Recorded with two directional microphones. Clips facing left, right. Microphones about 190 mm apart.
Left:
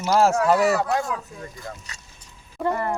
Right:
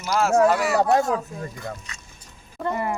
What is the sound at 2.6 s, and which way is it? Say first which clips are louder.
Speech: left 3 dB; centre (ahead or behind).